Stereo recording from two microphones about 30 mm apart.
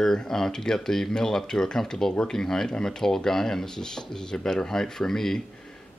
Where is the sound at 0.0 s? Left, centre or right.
Centre.